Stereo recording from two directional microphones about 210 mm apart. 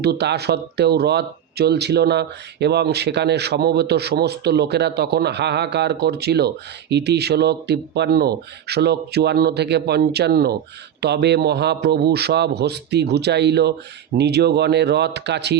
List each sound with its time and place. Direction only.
0.0 s speech: 50° right (ahead or behind)